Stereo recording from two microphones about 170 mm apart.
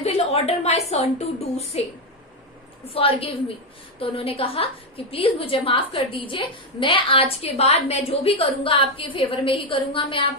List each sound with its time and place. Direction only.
0.0 s a woman's voice: 35° left (ahead or behind)
2.9 s a woman's voice: 35° left (ahead or behind)